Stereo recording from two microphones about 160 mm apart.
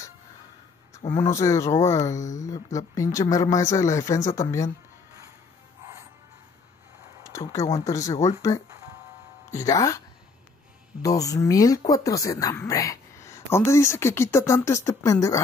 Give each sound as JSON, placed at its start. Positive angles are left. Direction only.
{"t": 0.9, "sound": "speech", "side_deg": 25}
{"t": 7.2, "sound": "a sound", "side_deg": 20}
{"t": 7.7, "sound": "speech", "side_deg": 20}